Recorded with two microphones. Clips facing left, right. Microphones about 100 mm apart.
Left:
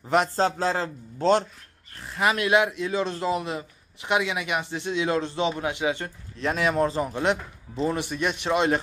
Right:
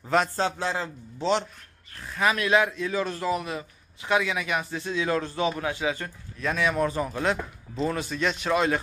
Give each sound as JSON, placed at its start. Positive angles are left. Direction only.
{"t": 0.4, "sound": "a man's voice", "side_deg": 35}
{"t": 2.0, "sound": "a man's voice", "side_deg": 20}